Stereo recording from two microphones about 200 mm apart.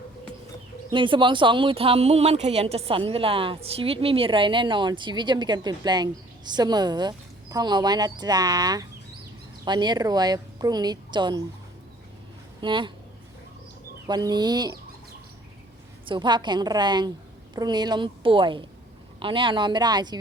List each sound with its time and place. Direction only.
0.9 s speech: 25° right (ahead or behind)
12.6 s speech: 25° right (ahead or behind)
14.1 s speech: 20° right (ahead or behind)
16.0 s speech: 25° right (ahead or behind)